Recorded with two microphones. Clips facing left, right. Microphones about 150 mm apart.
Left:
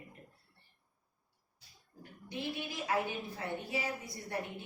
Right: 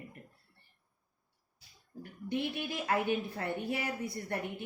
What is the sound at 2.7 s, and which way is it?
A woman's voice, 60° right (ahead or behind).